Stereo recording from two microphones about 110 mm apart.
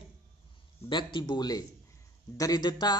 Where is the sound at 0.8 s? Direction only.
45° left (ahead or behind).